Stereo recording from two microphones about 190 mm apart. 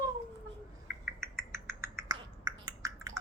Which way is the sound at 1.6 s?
15° right (ahead or behind).